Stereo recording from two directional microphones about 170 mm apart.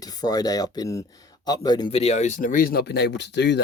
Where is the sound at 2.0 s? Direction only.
40° left (ahead or behind); by 3.6 s 90° left.